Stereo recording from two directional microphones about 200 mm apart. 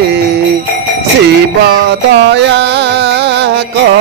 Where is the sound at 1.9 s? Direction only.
60° right (ahead or behind).